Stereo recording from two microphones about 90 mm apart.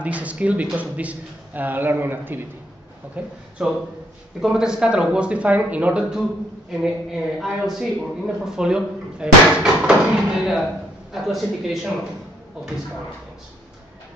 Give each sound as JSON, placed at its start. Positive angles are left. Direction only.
{"t": 0.0, "sound": "a man's voice", "side_deg": -15}
{"t": 3.2, "sound": "a woman's voice", "side_deg": -10}